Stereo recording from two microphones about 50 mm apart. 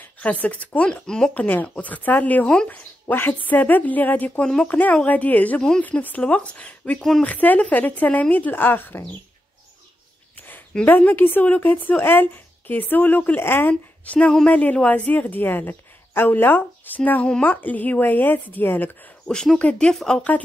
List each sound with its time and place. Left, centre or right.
0.2 s speech: left
1.0 s speech: centre
1.3 s speech: left
2.4 s speech: centre
3.1 s speech: left
7.0 s speech: centre
7.2 s speech: left
10.9 s speech: left
13.7 s a woman's voice: left
19.2 s speech: centre
19.6 s speech: left
19.9 s speech: centre